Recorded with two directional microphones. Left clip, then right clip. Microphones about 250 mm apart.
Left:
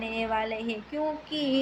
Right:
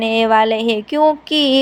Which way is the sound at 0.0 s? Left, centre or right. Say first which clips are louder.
Right 16 dB; right.